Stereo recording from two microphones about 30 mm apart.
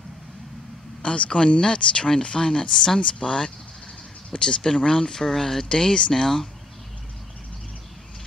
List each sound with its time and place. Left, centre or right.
1.0 s speech: left
2.7 s speech: centre
3.0 s speech: left; by 5.7 s centre
5.7 s speech: left